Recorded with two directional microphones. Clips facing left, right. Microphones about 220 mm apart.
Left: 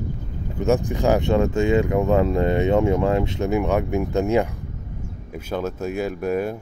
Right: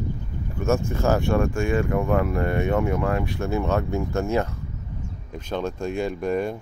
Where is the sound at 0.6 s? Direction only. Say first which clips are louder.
Left 3 dB; 15° left (ahead or behind).